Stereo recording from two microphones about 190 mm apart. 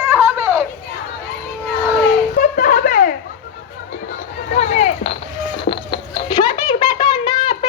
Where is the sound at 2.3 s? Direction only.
45° left (ahead or behind).